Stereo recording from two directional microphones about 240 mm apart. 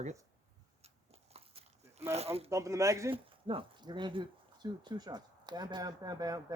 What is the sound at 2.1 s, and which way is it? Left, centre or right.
Speech, right.